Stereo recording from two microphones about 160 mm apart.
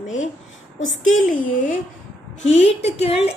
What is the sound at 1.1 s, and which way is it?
Speech, 55° left (ahead or behind).